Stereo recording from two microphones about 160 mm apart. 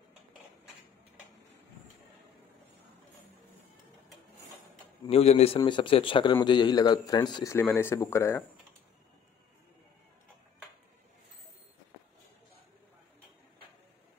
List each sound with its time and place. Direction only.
5.0 s speech: 40° left (ahead or behind)
7.5 s speech: 15° left (ahead or behind)